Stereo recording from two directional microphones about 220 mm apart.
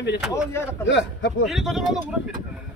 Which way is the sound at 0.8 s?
55° left (ahead or behind).